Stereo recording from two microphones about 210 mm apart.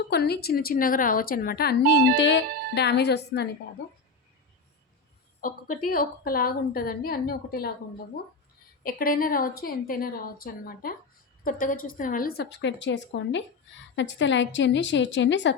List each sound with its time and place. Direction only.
0.1 s a woman's voice: 50° left (ahead or behind)
5.4 s a woman's voice: 40° left (ahead or behind)
8.8 s a woman's voice: 45° left (ahead or behind); by 15.5 s 60° left (ahead or behind)